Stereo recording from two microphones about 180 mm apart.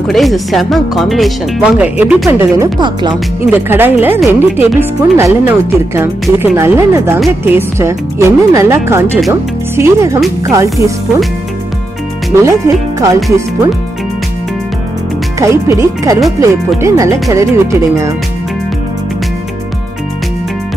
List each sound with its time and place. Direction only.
0.1 s speech: centre (ahead or behind)
2.2 s speech: 15° right (ahead or behind)
3.5 s speech: 10° right (ahead or behind)
12.4 s speech: 20° right (ahead or behind)
15.3 s speech: 15° right (ahead or behind)